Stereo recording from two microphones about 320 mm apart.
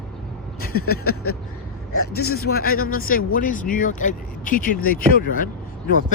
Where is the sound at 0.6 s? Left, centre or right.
Left.